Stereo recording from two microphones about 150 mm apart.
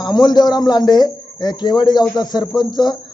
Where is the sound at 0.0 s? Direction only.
30° left (ahead or behind).